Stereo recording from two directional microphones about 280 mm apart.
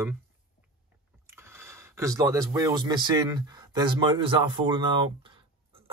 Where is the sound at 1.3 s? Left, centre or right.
Centre.